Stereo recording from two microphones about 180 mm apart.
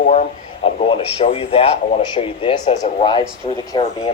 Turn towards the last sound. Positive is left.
turn(degrees=25)  # may be behind; listen again after turning